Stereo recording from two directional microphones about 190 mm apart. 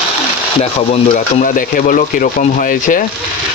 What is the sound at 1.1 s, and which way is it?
Speech, 45° left (ahead or behind).